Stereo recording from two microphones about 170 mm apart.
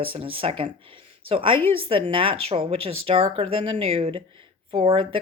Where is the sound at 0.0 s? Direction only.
30° right (ahead or behind).